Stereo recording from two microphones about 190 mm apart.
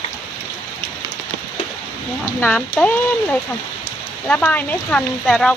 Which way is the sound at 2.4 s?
10° left (ahead or behind).